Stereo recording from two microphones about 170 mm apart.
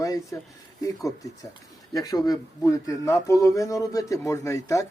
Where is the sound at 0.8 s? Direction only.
20° left (ahead or behind).